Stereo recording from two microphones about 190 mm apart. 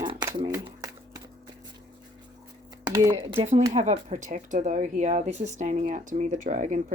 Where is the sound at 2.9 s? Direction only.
15° right (ahead or behind).